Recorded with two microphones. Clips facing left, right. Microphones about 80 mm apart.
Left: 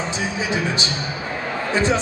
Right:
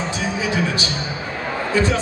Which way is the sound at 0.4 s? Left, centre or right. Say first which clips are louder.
Right 1 dB; left.